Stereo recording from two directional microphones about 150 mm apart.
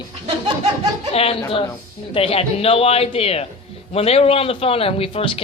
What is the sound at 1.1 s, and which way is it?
A woman's voice, 40° left (ahead or behind).